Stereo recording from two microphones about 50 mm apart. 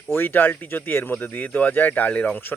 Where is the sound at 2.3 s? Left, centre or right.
Left.